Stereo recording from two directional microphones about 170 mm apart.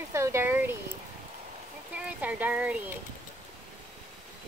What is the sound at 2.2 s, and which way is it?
Speech, 10° right (ahead or behind).